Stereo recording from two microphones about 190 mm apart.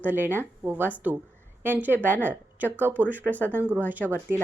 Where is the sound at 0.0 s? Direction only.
10° right (ahead or behind).